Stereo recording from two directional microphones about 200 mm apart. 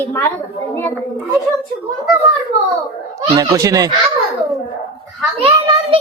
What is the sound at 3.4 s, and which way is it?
Speech, 20° right (ahead or behind).